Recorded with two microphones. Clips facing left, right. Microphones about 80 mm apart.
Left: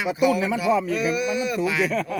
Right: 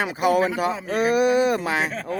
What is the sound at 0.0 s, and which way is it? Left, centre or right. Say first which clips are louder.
Speech: right 1 dB; right.